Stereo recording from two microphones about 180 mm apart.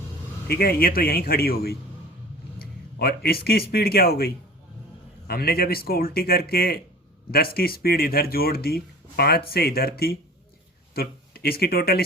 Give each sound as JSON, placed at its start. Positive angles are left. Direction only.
{"t": 0.4, "sound": "speech", "side_deg": 60}
{"t": 5.3, "sound": "speech", "side_deg": 60}